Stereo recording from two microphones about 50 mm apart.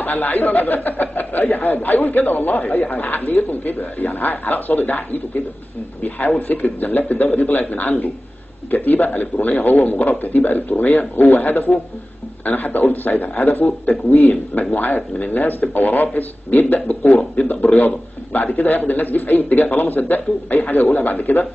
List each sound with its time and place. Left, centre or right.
0.0 s speech: left